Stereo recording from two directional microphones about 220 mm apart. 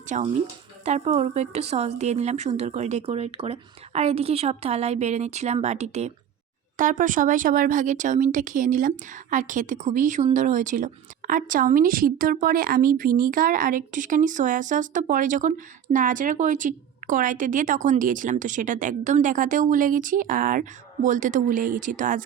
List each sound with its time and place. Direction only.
0.1 s a woman's voice: 35° right (ahead or behind)